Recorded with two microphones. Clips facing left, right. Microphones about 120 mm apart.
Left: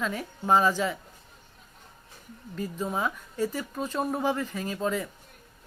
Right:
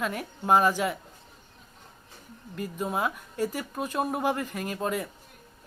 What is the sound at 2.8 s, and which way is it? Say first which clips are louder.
Speech: right 1 dB; 10° right (ahead or behind).